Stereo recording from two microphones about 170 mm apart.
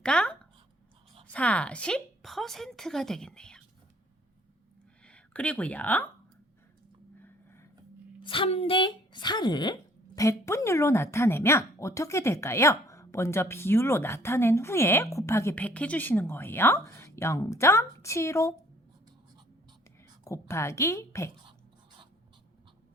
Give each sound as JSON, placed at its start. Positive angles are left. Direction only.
{"t": 0.0, "sound": "a woman's voice", "side_deg": 5}
{"t": 5.0, "sound": "speech", "side_deg": 5}
{"t": 7.2, "sound": "a sound", "side_deg": 15}
{"t": 8.2, "sound": "a woman's voice", "side_deg": 30}
{"t": 20.2, "sound": "a woman's voice", "side_deg": 15}